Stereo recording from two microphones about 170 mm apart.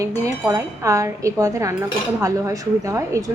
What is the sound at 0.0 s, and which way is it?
Speech, 20° right (ahead or behind).